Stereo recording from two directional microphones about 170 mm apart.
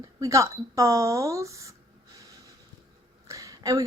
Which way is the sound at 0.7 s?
20° right (ahead or behind).